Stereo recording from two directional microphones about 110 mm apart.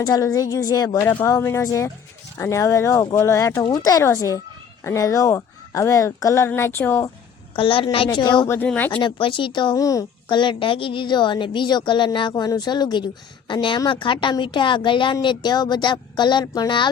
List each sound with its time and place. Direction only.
0.0 s speech: 35° left (ahead or behind)
7.5 s speech: 55° left (ahead or behind)
8.4 s speech: 15° left (ahead or behind)
8.9 s speech: 50° left (ahead or behind)
9.7 s speech: 30° left (ahead or behind)
10.2 s speech: 45° left (ahead or behind)